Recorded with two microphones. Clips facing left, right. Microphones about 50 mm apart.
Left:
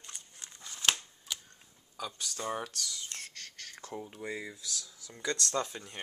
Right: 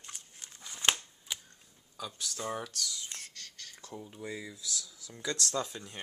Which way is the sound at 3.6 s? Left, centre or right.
Left.